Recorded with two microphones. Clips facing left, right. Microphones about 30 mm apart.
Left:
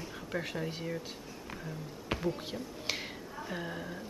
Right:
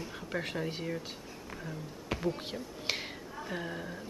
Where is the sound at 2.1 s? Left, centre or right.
Left.